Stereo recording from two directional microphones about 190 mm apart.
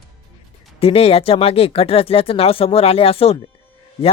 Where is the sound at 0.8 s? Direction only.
30° left (ahead or behind).